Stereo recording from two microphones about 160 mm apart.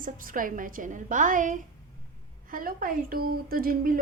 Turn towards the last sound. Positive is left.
turn(degrees=-65)  # may be behind; listen again after turning